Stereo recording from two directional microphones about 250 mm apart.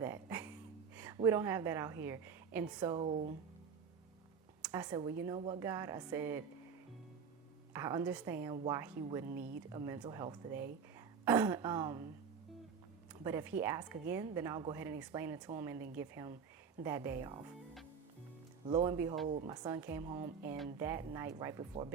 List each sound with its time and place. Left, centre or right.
0.0 s music: centre
0.9 s a woman's voice: centre
4.6 s a woman's voice: centre
7.7 s a woman's voice: centre
13.2 s a woman's voice: centre
18.6 s a woman's voice: centre